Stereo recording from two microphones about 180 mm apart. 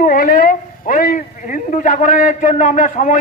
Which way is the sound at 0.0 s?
50° left (ahead or behind).